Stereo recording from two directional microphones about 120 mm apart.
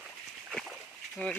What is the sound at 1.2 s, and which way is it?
Speech, 15° left (ahead or behind).